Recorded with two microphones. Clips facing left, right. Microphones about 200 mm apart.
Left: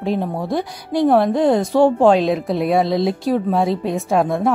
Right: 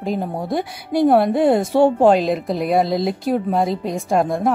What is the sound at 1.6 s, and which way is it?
Speech, 25° right (ahead or behind).